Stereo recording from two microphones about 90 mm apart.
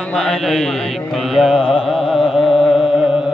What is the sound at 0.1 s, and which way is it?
Mantra, centre (ahead or behind).